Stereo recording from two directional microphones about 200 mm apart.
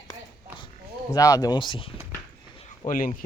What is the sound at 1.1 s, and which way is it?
Speech, 15° left (ahead or behind).